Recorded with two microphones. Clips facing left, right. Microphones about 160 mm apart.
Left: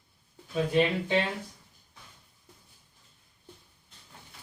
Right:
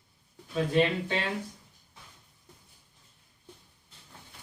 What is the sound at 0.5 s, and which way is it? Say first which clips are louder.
Speech: even; 15° left (ahead or behind).